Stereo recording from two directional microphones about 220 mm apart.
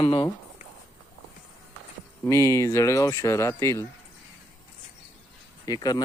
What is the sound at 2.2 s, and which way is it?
Speech, 15° left (ahead or behind).